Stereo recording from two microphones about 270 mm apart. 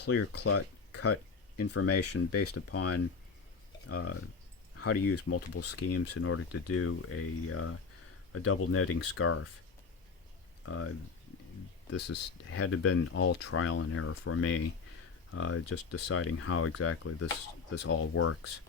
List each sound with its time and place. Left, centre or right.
0.1 s speech: left
10.7 s speech: left
11.9 s speech: left